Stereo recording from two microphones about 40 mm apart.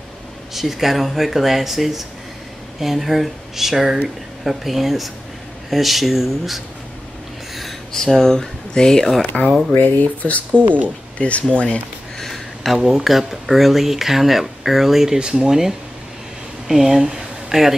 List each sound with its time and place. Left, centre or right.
0.5 s speech: centre
8.1 s speech: centre
9.2 s speech: left
9.8 s speech: left
12.2 s a sound: centre
12.7 s speech: centre
15.1 s speech: right
16.6 s speech: centre